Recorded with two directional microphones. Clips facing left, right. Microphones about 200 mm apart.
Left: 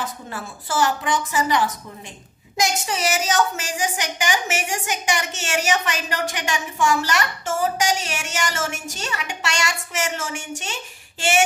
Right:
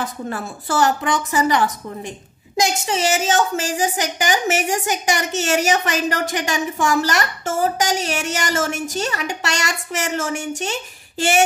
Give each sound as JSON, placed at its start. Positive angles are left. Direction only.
{"t": 0.7, "sound": "a woman's voice", "side_deg": -45}
{"t": 2.6, "sound": "a woman's voice", "side_deg": -25}